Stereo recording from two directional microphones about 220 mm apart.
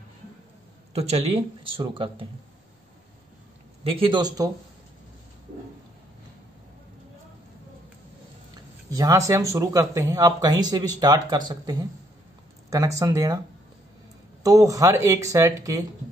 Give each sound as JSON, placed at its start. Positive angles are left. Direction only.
{"t": 0.9, "sound": "speech", "side_deg": -30}
{"t": 3.9, "sound": "speech", "side_deg": -20}
{"t": 8.9, "sound": "speech", "side_deg": -15}
{"t": 14.4, "sound": "speech", "side_deg": -15}